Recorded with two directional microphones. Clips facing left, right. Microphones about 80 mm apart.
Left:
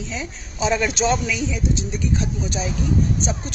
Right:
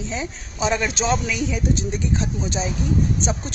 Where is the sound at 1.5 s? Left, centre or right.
Right.